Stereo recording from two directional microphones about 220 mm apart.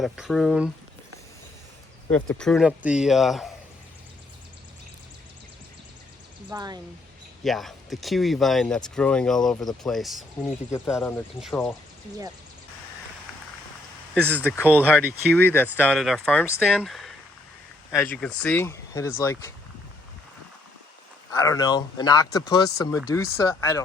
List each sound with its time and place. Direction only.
0.0 s speech: centre (ahead or behind)
2.0 s speech: 5° left (ahead or behind)
6.5 s speech: 20° right (ahead or behind)
7.4 s speech: centre (ahead or behind)
14.1 s speech: 10° right (ahead or behind)
14.4 s speech: 10° left (ahead or behind)
14.8 s speech: 5° right (ahead or behind)
15.4 s speech: 10° left (ahead or behind)
21.3 s speech: 15° left (ahead or behind)